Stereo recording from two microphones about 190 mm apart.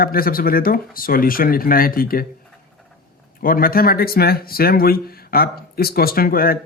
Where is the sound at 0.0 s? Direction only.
50° left (ahead or behind).